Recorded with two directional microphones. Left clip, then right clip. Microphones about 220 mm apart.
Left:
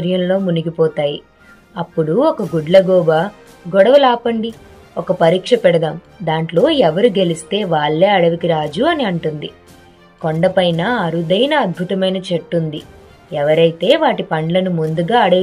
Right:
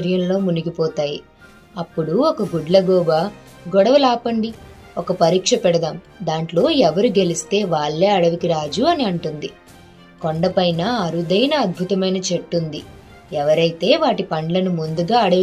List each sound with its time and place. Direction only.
0.0 s a woman's voice: 25° left (ahead or behind)